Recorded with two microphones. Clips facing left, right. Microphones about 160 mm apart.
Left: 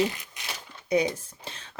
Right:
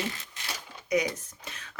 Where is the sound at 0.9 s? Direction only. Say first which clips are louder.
Left 3 dB; 30° left (ahead or behind).